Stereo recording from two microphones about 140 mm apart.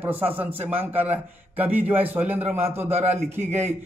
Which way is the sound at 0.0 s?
15° right (ahead or behind).